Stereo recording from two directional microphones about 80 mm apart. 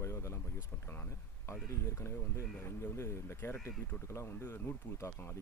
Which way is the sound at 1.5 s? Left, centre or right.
Left.